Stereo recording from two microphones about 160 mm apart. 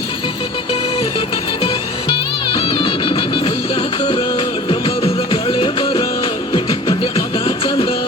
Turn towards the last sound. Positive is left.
turn(degrees=35)  # may be behind; listen again after turning